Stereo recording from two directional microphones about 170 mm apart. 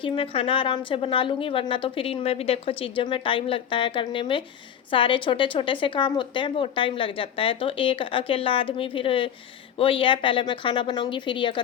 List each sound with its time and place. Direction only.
0.0 s a woman's voice: 35° left (ahead or behind)